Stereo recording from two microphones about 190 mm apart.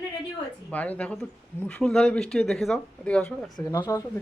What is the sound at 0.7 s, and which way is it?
A woman's voice, 5° left (ahead or behind).